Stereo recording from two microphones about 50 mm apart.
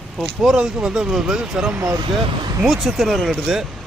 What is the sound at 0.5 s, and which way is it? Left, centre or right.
Speech, centre.